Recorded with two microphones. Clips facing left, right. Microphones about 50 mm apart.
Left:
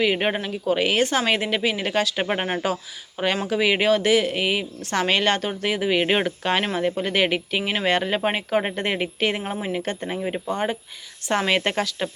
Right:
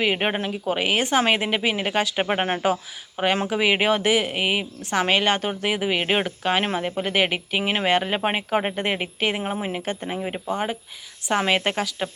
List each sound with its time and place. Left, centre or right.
0.0 s speech: centre